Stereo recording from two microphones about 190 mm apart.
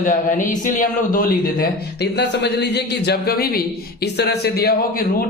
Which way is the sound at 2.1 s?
65° left (ahead or behind).